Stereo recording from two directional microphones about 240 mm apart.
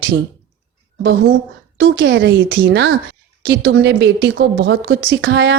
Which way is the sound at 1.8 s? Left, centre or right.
Right.